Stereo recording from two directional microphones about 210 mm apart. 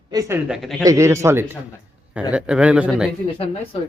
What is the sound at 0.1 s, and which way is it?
Speech, 15° right (ahead or behind).